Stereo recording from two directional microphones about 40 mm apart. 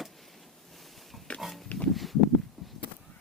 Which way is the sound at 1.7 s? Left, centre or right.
Left.